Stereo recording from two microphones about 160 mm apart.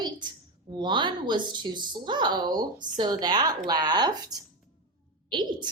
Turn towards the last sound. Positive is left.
turn(degrees=-25)  # may be behind; listen again after turning